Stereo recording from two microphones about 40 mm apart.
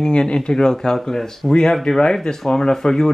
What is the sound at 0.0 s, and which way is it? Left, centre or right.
Speech, left.